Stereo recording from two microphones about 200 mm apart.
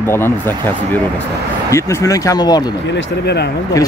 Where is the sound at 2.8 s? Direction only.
60° left (ahead or behind).